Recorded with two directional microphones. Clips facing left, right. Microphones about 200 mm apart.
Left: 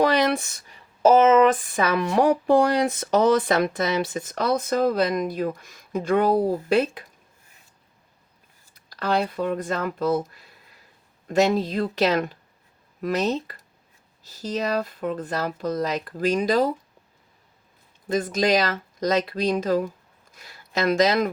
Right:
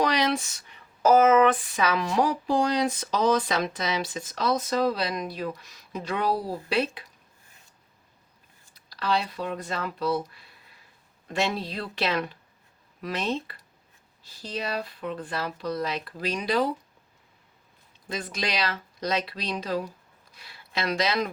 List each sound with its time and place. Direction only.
0.0 s a sound: 55° left (ahead or behind)
1.0 s speech: 25° left (ahead or behind)
1.6 s speech: 50° left (ahead or behind)
8.7 s speech: 50° left (ahead or behind)
18.1 s speech: 45° left (ahead or behind)